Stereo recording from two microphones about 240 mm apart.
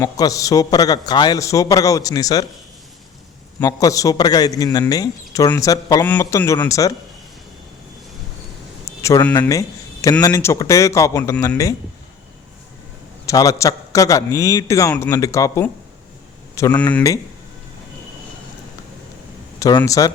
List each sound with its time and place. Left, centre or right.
0.0 s a man's voice: centre
3.6 s a man's voice: centre
8.8 s a man's voice: centre
13.2 s a man's voice: centre
19.5 s speech: centre